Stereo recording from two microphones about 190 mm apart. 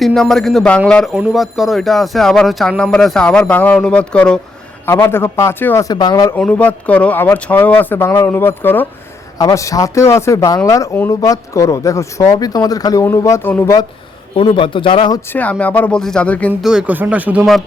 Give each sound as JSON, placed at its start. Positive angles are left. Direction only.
{"t": 0.0, "sound": "speech", "side_deg": 0}
{"t": 6.3, "sound": "speech", "side_deg": 10}
{"t": 14.3, "sound": "speech", "side_deg": 25}
{"t": 15.3, "sound": "speech", "side_deg": 5}